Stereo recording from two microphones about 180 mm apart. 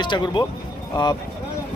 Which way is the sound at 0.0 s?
25° left (ahead or behind).